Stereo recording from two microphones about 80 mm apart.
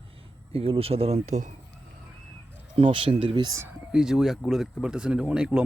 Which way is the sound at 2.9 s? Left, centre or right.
Right.